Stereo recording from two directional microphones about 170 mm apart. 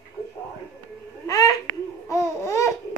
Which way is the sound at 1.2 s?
20° left (ahead or behind).